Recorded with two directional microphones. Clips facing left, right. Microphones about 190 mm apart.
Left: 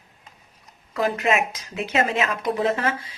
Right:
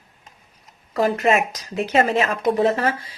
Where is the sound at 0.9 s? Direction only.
40° right (ahead or behind).